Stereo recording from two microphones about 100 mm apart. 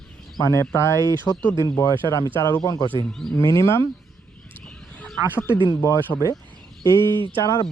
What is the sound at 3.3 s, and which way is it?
Speech, 30° left (ahead or behind).